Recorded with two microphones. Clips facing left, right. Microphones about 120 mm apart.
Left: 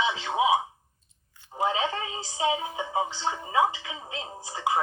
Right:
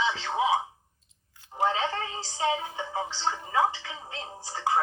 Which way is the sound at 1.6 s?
15° left (ahead or behind).